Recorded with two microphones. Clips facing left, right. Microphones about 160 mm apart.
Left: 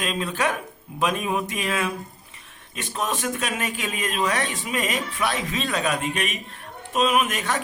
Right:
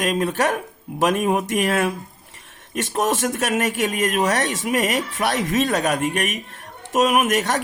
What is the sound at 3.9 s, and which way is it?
Speech, 65° right (ahead or behind).